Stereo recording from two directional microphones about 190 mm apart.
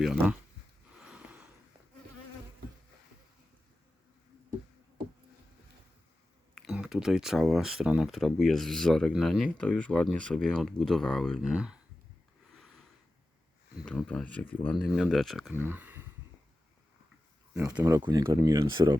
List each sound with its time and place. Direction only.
0.0 s speech: centre (ahead or behind)
0.9 s a sound: 5° right (ahead or behind)
6.5 s speech: centre (ahead or behind)
12.5 s a sound: centre (ahead or behind)
13.7 s speech: 5° left (ahead or behind)
15.5 s speech: 10° right (ahead or behind)
17.7 s speech: 15° right (ahead or behind)